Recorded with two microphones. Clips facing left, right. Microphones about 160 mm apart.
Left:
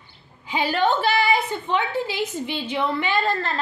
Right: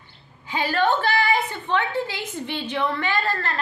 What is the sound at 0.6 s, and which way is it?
A woman's voice, 15° left (ahead or behind).